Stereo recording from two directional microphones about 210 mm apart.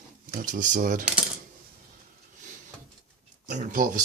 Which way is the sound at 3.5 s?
40° right (ahead or behind).